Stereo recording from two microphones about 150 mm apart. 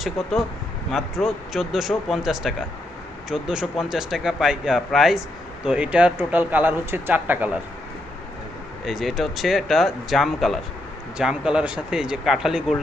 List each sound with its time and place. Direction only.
0.0 s speech: centre (ahead or behind)
8.8 s speech: centre (ahead or behind)